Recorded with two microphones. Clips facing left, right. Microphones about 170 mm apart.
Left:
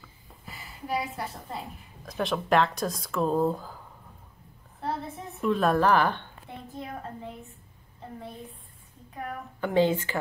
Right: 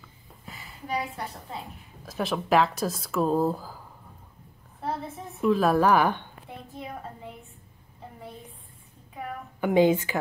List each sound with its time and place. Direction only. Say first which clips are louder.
0.0 s a woman's voice: right 1 dB; centre (ahead or behind)
9.1 s a woman's voice: even; 15° right (ahead or behind)